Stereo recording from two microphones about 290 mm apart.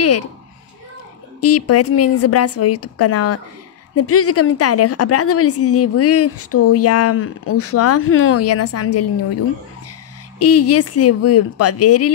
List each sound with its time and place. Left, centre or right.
1.4 s a woman's voice: left
10.4 s a woman's voice: left